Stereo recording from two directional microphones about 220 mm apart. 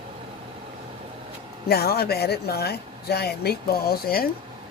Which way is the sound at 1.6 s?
45° left (ahead or behind).